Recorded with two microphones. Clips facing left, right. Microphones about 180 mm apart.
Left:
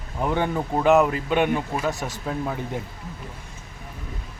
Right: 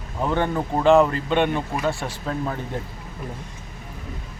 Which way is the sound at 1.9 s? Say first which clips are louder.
Right 2 dB; 40° left (ahead or behind).